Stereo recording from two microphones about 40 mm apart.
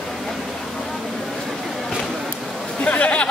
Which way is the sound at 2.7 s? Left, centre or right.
Left.